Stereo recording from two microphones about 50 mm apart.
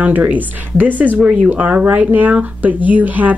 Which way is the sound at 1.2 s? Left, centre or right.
Right.